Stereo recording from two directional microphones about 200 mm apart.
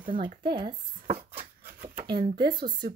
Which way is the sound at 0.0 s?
40° right (ahead or behind).